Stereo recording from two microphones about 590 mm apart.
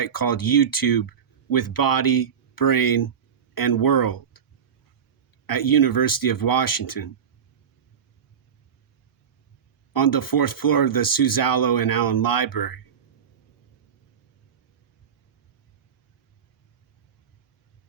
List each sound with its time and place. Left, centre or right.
0.0 s speech: left
5.5 s speech: left
9.9 s speech: left